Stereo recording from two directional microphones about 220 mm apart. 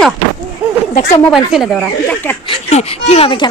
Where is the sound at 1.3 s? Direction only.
Centre (ahead or behind).